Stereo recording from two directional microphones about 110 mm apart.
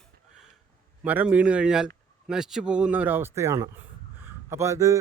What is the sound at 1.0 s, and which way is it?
A man's voice, 15° right (ahead or behind).